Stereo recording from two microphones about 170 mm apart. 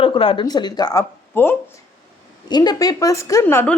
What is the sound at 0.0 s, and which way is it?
A woman's voice, 30° left (ahead or behind).